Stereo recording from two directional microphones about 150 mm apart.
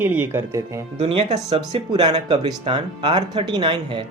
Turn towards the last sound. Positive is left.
turn(degrees=-35)  # may be behind; listen again after turning